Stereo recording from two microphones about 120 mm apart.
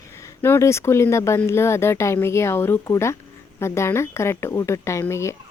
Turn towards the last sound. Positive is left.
turn(degrees=25)  # may be behind; listen again after turning